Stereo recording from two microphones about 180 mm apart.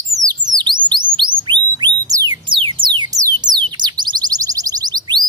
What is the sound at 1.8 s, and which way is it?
Music, 20° right (ahead or behind).